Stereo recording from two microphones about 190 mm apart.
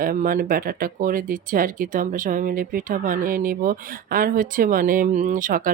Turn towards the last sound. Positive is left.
turn(degrees=-45)  # may be behind; listen again after turning